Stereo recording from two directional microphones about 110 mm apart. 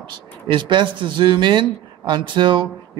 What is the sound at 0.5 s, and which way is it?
Speech, 45° right (ahead or behind).